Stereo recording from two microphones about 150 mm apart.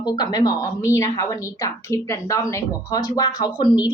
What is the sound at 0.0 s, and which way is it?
A woman's voice, 30° left (ahead or behind).